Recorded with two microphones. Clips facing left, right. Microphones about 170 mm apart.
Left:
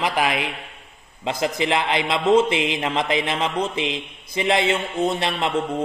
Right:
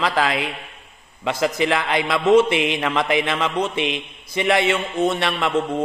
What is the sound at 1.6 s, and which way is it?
Mantra, 25° left (ahead or behind).